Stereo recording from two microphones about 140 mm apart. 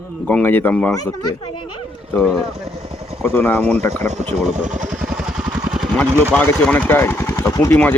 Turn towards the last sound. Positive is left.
turn(degrees=15)  # may be behind; listen again after turning